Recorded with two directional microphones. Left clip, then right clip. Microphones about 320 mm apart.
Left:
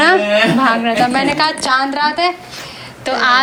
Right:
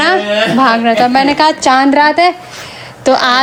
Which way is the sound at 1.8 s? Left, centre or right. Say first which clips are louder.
Right 7 dB; right.